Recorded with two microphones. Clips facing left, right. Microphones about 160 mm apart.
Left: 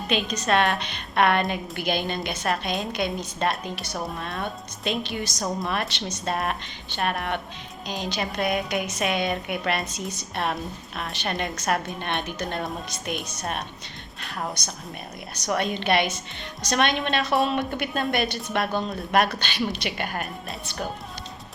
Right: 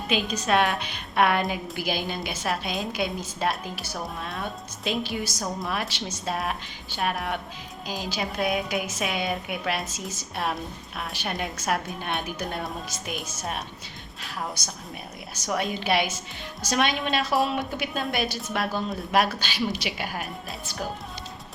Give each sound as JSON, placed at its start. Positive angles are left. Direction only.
{"t": 0.1, "sound": "a woman's voice", "side_deg": -5}
{"t": 9.9, "sound": "a woman's voice", "side_deg": 60}
{"t": 10.3, "sound": "a woman's voice", "side_deg": -5}